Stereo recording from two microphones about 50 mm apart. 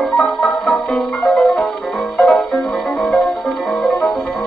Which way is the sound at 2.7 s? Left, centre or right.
Centre.